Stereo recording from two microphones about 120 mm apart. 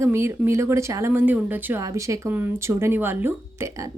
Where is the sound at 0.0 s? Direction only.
20° right (ahead or behind).